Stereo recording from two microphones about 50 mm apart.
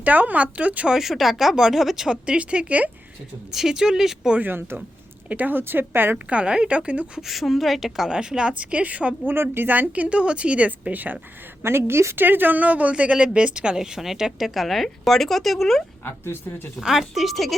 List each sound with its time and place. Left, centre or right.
0.0 s a woman's voice: right
0.9 s speech: centre
2.0 s a woman's voice: right
3.5 s speech: centre
4.4 s speech: right
6.3 s a woman's voice: centre
7.2 s speech: centre
8.1 s a woman's voice: centre
9.2 s speech: right
11.6 s a woman's voice: right
12.2 s speech: right; by 15.8 s centre
16.0 s speech: left
16.8 s speech: centre